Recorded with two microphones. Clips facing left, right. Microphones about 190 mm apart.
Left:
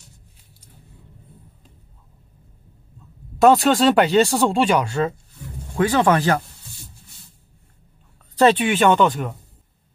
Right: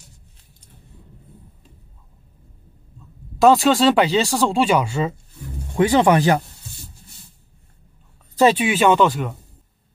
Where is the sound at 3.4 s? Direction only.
Centre (ahead or behind).